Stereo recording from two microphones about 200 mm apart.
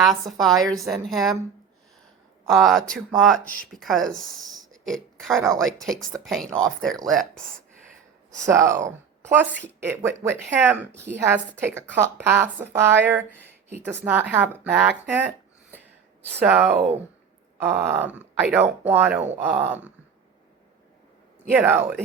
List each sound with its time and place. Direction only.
0.0 s speech: centre (ahead or behind)
2.5 s speech: centre (ahead or behind)
3.4 s speech: 45° right (ahead or behind)
3.7 s speech: centre (ahead or behind)
4.7 s oink: centre (ahead or behind)
5.5 s speech: centre (ahead or behind)
8.4 s a woman's voice: 15° right (ahead or behind)
16.4 s a woman's voice: 5° right (ahead or behind)
21.5 s a woman's voice: 10° right (ahead or behind)